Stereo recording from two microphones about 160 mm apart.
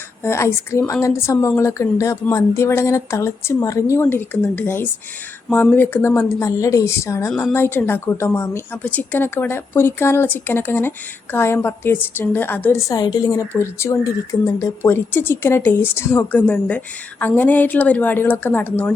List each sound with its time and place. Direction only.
0.2 s speech: 15° left (ahead or behind)